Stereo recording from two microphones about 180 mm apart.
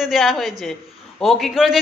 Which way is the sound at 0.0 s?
Centre (ahead or behind).